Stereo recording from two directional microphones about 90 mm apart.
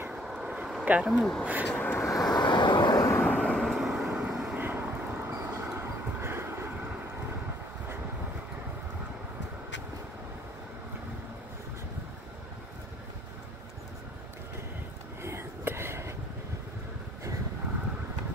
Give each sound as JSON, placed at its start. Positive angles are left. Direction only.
{"t": 0.1, "sound": "vehicle", "side_deg": -5}
{"t": 0.8, "sound": "speech", "side_deg": -15}
{"t": 1.1, "sound": "speech", "side_deg": 5}
{"t": 1.4, "sound": "speech", "side_deg": -20}
{"t": 1.7, "sound": "vehicle", "side_deg": 20}
{"t": 2.0, "sound": "vehicle", "side_deg": 35}
{"t": 2.3, "sound": "vehicle", "side_deg": 55}
{"t": 3.0, "sound": "vehicle", "side_deg": 25}
{"t": 3.3, "sound": "vehicle", "side_deg": 10}
{"t": 4.6, "sound": "vehicle", "side_deg": -20}
{"t": 4.8, "sound": "vehicle", "side_deg": -10}
{"t": 5.2, "sound": "train", "side_deg": -25}
{"t": 5.6, "sound": "vehicle", "side_deg": -25}
{"t": 15.2, "sound": "a sound", "side_deg": -30}